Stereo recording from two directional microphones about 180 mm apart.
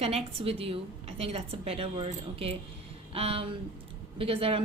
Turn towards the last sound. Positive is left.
turn(degrees=-30)  # may be behind; listen again after turning